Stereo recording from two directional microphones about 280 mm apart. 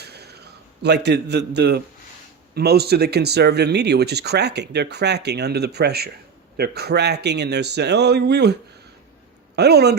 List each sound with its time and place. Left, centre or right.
0.0 s a sound: right
0.8 s speech: right
9.6 s speech: right